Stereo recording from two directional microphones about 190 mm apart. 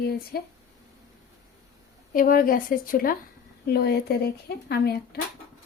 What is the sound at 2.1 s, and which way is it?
A woman's voice, 45° left (ahead or behind).